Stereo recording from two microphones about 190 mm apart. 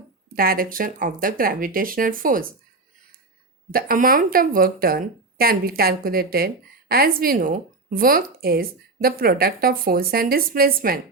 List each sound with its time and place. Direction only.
0.3 s speech: 50° right (ahead or behind)
3.7 s speech: 50° right (ahead or behind)